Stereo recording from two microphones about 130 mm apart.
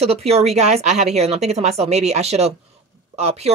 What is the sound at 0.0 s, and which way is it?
Speech, 50° right (ahead or behind).